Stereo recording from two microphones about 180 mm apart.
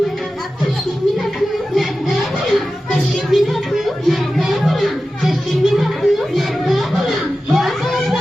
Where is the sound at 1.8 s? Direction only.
Centre (ahead or behind).